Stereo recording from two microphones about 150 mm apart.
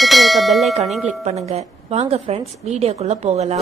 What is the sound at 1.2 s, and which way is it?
A woman's voice, 45° right (ahead or behind).